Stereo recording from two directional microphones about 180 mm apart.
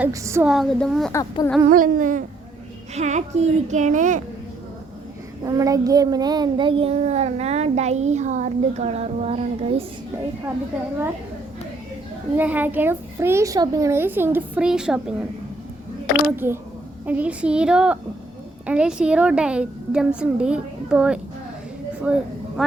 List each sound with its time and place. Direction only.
0.0 s a child's voice: 15° right (ahead or behind)
0.4 s a woman's voice: centre (ahead or behind)
1.1 s a sound: 20° left (ahead or behind)
1.6 s a sound: 50° right (ahead or behind)
2.9 s a child's voice: 40° right (ahead or behind)
5.5 s a child's voice: 20° right (ahead or behind)
12.4 s a child's voice: 10° right (ahead or behind)
16.3 s a child's voice: 10° right (ahead or behind)